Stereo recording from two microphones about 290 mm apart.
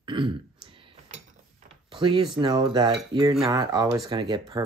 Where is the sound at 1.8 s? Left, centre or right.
Centre.